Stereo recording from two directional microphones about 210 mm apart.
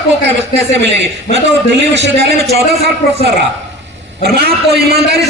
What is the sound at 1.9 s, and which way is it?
Speech, 55° right (ahead or behind).